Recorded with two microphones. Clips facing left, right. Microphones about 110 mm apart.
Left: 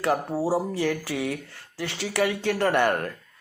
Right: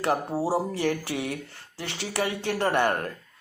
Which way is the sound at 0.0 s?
25° right (ahead or behind).